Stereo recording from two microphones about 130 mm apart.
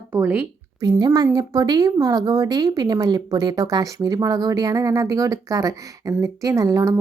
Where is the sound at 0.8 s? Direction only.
30° right (ahead or behind).